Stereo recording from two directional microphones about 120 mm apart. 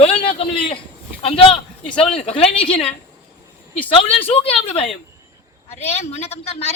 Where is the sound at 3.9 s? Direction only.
50° left (ahead or behind).